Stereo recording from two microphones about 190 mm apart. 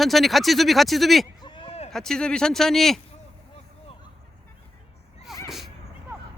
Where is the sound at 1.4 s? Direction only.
30° left (ahead or behind).